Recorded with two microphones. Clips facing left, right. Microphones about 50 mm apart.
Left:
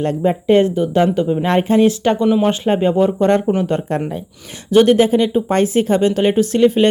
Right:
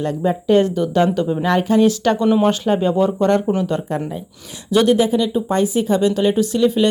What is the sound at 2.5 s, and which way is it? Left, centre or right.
Speech, left.